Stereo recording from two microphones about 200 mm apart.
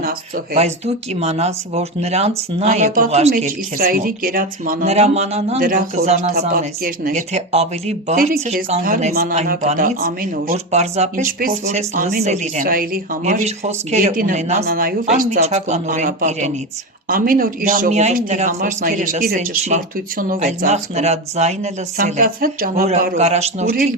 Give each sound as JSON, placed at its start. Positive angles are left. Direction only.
{"t": 1.1, "sound": "speech", "side_deg": -30}
{"t": 21.9, "sound": "speech", "side_deg": -45}
{"t": 23.0, "sound": "speech", "side_deg": -35}